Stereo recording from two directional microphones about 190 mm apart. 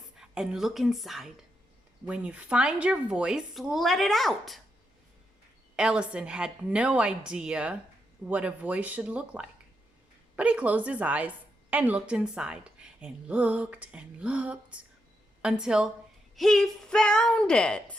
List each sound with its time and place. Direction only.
0.2 s speech: 5° right (ahead or behind)
5.7 s a woman's voice: 5° right (ahead or behind)